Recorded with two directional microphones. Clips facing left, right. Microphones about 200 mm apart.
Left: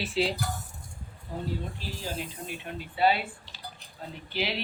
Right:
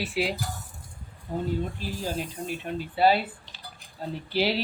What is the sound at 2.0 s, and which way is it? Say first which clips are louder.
Speech: right 5 dB; 45° right (ahead or behind).